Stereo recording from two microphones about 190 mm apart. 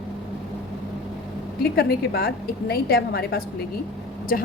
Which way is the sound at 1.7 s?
55° left (ahead or behind).